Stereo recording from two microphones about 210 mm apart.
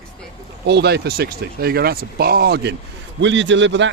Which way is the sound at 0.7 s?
50° right (ahead or behind).